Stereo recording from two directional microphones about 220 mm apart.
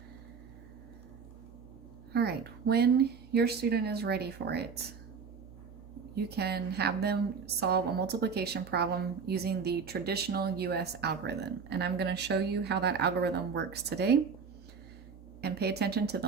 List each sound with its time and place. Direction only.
2.1 s a woman's voice: 45° right (ahead or behind)
6.2 s a woman's voice: 45° right (ahead or behind)
15.4 s a woman's voice: 45° right (ahead or behind)